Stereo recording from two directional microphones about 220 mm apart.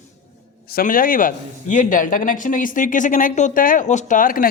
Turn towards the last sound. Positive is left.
turn(degrees=40)  # may be behind; listen again after turning